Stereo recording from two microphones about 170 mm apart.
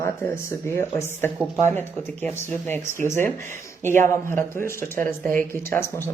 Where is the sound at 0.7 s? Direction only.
15° left (ahead or behind).